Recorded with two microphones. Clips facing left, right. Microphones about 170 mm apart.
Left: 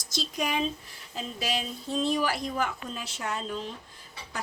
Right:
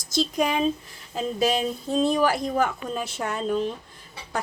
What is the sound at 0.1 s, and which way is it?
A woman's voice, 50° right (ahead or behind).